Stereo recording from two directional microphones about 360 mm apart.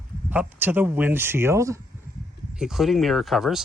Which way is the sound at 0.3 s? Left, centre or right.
Centre.